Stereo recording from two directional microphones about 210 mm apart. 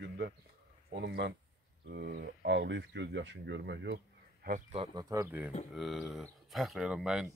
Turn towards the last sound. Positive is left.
turn(degrees=-5)  # may be behind; listen again after turning